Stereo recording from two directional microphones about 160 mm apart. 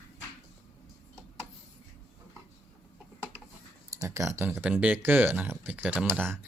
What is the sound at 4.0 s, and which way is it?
Speech, 20° right (ahead or behind).